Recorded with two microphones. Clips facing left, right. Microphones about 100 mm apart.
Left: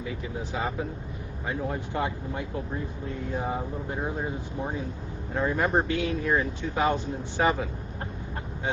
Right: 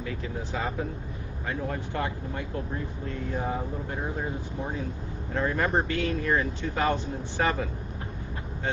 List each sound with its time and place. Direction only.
0.0 s speech: 15° left (ahead or behind)
5.3 s speech: 15° left (ahead or behind)